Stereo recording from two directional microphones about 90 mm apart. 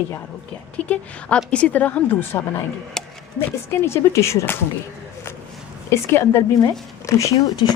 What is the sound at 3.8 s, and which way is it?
Speech, 30° left (ahead or behind).